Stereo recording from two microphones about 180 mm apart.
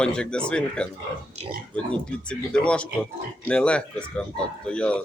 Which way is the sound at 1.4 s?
35° right (ahead or behind).